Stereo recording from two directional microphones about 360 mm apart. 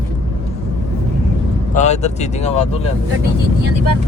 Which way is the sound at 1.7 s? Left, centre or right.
Centre.